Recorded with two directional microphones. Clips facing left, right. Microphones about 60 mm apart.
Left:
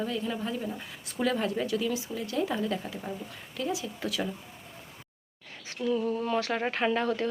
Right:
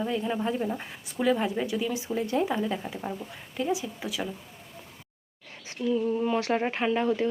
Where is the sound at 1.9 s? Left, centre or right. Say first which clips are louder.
Right 4 dB; right.